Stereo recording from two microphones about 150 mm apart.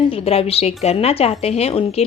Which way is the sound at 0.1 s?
40° left (ahead or behind).